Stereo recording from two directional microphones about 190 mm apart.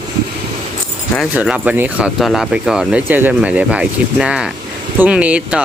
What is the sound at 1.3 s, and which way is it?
Speech, 5° right (ahead or behind).